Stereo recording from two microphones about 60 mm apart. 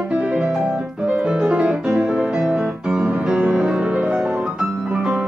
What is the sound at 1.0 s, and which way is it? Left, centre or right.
Piano, centre.